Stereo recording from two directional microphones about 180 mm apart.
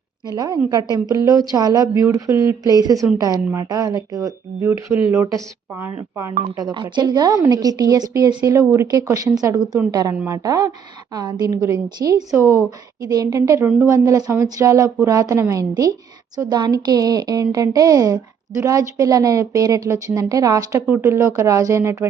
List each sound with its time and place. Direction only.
0.3 s a woman's voice: 20° right (ahead or behind)